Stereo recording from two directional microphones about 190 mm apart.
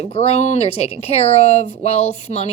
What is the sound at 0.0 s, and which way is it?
Speech, 35° left (ahead or behind).